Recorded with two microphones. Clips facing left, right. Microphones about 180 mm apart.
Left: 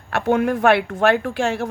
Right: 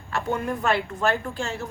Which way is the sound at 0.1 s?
75° left (ahead or behind).